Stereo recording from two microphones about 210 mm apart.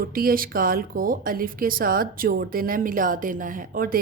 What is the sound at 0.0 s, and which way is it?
A woman's voice, 45° right (ahead or behind).